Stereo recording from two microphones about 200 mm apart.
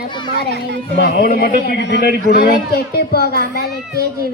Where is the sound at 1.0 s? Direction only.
50° left (ahead or behind).